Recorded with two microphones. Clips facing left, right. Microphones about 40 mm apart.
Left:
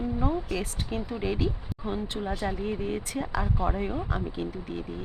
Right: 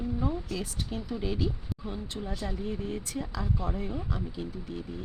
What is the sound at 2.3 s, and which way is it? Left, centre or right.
Speech, left.